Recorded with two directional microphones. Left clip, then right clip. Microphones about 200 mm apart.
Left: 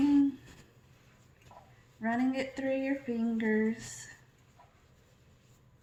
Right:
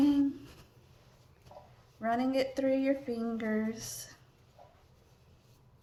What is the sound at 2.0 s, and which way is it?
Speech, 45° right (ahead or behind).